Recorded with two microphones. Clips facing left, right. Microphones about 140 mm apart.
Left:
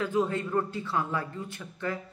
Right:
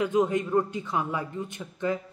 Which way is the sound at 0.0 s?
20° right (ahead or behind).